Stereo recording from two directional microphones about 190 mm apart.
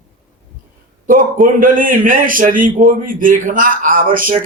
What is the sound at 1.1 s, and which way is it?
A man's voice, 45° right (ahead or behind).